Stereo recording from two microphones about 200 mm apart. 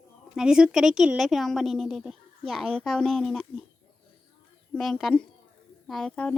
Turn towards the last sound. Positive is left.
turn(degrees=5)  # may be behind; listen again after turning